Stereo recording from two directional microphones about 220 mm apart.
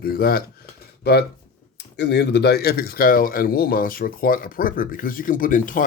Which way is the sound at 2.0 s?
50° left (ahead or behind).